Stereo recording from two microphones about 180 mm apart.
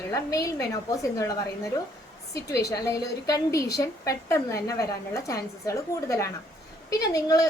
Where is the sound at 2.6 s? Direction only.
20° left (ahead or behind).